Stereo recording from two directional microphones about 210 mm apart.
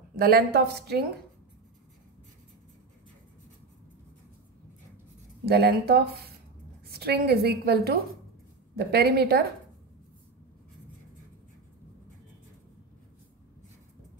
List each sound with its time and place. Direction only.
0.1 s a woman's voice: 45° right (ahead or behind)
5.4 s a woman's voice: 50° right (ahead or behind)